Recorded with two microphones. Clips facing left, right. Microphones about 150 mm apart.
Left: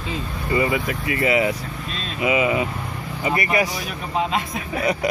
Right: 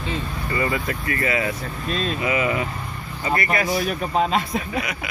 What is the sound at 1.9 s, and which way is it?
Speech, 45° right (ahead or behind).